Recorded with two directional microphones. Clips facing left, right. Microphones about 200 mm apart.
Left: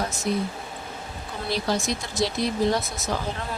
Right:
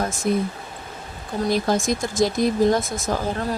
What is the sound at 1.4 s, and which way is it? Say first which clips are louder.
Speech: right 5 dB; 50° right (ahead or behind).